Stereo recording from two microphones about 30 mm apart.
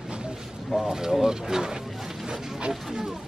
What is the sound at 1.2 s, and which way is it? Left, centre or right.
Speech, centre.